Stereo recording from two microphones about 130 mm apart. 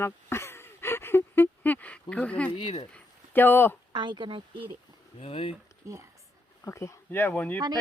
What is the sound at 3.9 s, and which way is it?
Speech, 35° right (ahead or behind).